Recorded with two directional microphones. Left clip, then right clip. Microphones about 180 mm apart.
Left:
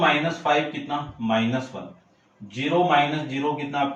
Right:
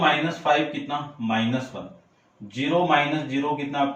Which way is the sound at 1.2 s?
15° left (ahead or behind).